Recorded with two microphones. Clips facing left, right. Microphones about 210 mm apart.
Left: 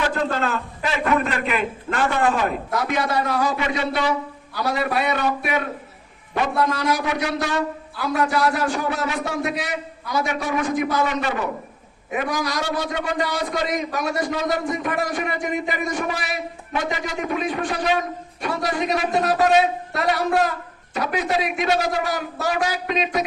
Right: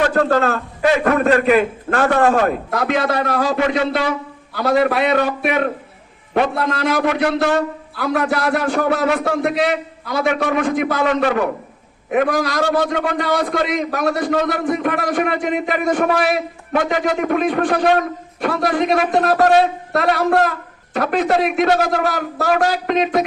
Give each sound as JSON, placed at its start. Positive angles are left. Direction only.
{"t": 0.1, "sound": "a man's voice", "side_deg": -45}